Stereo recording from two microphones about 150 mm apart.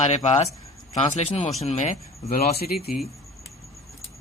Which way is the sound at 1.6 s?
50° left (ahead or behind).